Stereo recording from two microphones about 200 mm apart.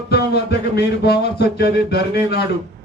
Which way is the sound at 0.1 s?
55° left (ahead or behind).